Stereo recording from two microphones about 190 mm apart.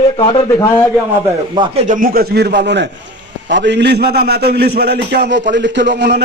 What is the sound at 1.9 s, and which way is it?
A man's voice, 50° right (ahead or behind).